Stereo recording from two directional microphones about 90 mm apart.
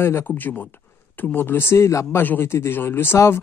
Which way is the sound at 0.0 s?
25° left (ahead or behind).